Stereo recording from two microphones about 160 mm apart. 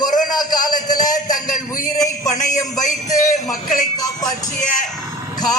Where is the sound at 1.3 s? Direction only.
55° left (ahead or behind).